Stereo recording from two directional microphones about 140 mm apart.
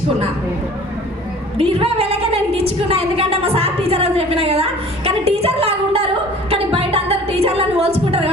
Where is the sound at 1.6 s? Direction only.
40° right (ahead or behind).